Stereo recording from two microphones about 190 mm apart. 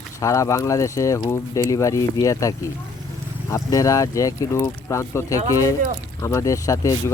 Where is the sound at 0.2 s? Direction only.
15° left (ahead or behind).